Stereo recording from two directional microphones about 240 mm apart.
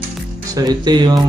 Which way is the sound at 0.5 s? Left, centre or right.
Centre.